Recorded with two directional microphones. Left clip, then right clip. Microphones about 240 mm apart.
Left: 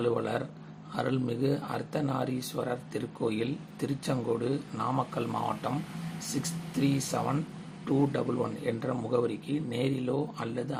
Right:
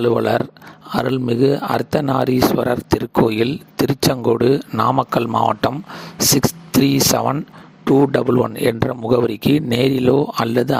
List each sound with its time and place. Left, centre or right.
0.0 s speech: right
6.8 s speech: right